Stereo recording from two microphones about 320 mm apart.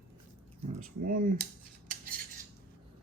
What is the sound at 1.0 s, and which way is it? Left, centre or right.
Speech, right.